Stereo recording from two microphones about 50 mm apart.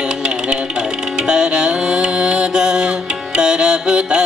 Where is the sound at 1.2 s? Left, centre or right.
Centre.